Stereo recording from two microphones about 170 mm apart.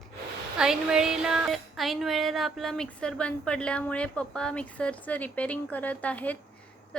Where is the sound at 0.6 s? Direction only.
5° right (ahead or behind).